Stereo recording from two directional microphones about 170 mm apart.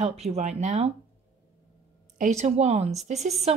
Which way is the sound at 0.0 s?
40° right (ahead or behind).